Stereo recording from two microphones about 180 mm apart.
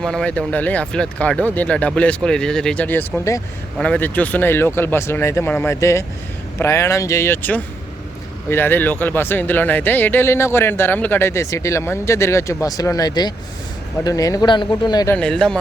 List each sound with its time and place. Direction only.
0.0 s speech: 5° left (ahead or behind); by 15.1 s 20° left (ahead or behind)
15.1 s speech: 5° left (ahead or behind)